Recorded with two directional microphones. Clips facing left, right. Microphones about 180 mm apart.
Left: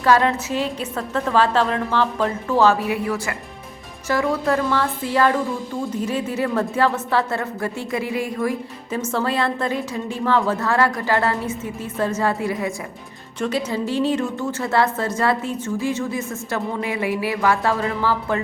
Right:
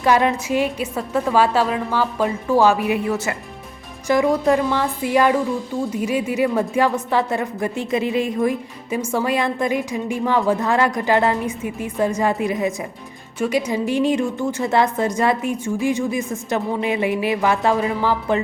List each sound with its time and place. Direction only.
0.0 s a woman's voice: 15° right (ahead or behind)